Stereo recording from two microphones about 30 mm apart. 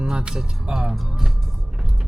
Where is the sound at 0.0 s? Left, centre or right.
Right.